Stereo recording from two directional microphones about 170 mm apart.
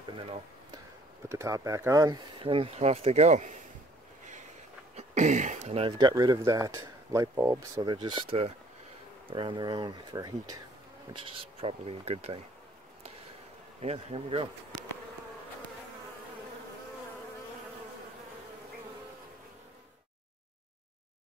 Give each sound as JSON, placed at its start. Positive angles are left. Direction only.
{"t": 1.3, "sound": "speech", "side_deg": -20}
{"t": 4.9, "sound": "speech", "side_deg": -45}
{"t": 11.1, "sound": "speech", "side_deg": -30}
{"t": 13.7, "sound": "speech", "side_deg": -35}